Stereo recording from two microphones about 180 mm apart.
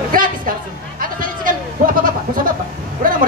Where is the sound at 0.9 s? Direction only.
50° right (ahead or behind).